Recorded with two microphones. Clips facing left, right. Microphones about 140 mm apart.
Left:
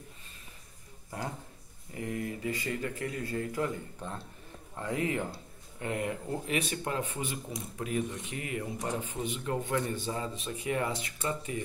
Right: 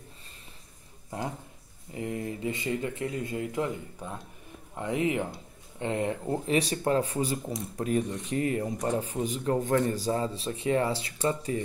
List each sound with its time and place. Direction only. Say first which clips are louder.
2.0 s speech: right 2 dB; 25° right (ahead or behind)
4.0 s speech: right 1 dB; 10° right (ahead or behind)
4.7 s speech: right 4 dB; 20° right (ahead or behind); by 11.6 s 35° right (ahead or behind)